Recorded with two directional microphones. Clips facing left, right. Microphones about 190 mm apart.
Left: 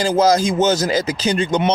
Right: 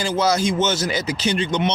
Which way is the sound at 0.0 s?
40° left (ahead or behind).